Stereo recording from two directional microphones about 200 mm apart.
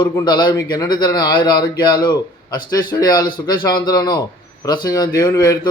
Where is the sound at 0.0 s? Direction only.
20° left (ahead or behind).